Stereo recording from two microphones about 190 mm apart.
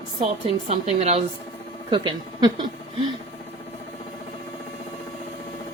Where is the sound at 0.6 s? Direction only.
35° right (ahead or behind).